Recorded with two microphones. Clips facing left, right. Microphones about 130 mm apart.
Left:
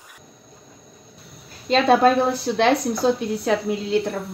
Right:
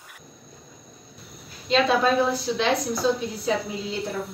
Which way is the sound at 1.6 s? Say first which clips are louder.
Left 5 dB; 50° left (ahead or behind).